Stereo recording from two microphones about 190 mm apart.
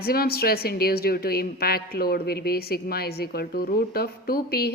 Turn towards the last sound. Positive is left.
turn(degrees=55)  # may be behind; listen again after turning